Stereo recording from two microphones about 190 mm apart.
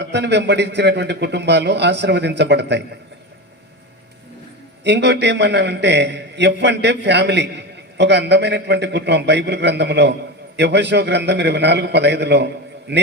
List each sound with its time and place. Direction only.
0.0 s a man's voice: 65° right (ahead or behind)
4.8 s a man's voice: 65° right (ahead or behind)